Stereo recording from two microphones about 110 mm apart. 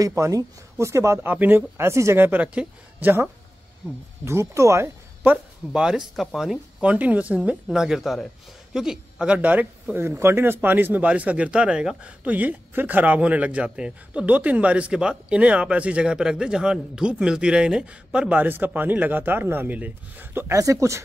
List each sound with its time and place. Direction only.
0.0 s speech: 30° right (ahead or behind)
5.7 s speech: 5° right (ahead or behind)
20.5 s speech: 30° right (ahead or behind)